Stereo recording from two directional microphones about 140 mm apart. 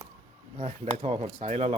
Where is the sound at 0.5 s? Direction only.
50° right (ahead or behind).